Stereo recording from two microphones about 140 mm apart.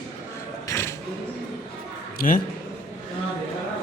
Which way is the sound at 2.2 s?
90° left.